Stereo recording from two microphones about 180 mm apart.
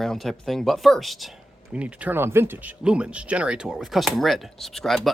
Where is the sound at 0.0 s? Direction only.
Centre (ahead or behind).